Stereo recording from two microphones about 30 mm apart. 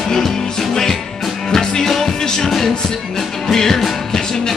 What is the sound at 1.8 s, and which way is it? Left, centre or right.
Music, centre.